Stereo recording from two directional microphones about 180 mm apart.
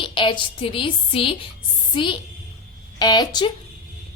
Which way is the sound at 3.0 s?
25° left (ahead or behind).